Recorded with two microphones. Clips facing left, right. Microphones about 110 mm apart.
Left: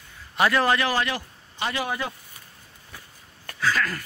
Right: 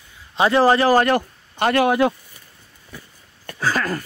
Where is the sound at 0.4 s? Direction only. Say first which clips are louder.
Right 6 dB; 30° right (ahead or behind); by 2.1 s 65° right (ahead or behind).